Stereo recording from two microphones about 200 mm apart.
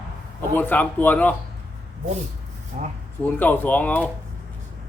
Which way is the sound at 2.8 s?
35° right (ahead or behind).